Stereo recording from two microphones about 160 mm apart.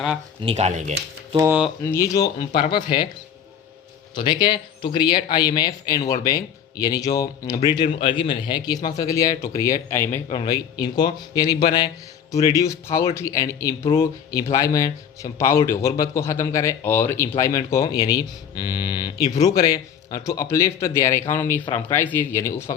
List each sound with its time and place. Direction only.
0.4 s speech: 45° right (ahead or behind)
1.8 s speech: 15° left (ahead or behind)
4.1 s speech: 30° left (ahead or behind)
10.3 s speech: 25° left (ahead or behind)